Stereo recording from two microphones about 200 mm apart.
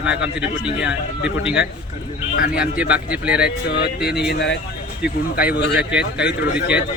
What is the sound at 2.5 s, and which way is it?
Speech, 5° right (ahead or behind).